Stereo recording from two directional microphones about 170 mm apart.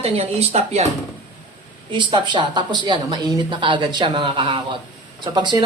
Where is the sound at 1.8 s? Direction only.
30° right (ahead or behind).